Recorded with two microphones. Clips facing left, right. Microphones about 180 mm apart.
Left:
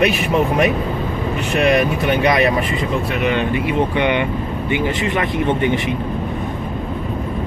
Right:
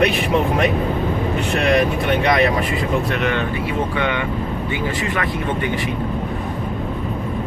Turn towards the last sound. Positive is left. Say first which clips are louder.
# left 4 dB
turn(degrees=20)  # may be behind; listen again after turning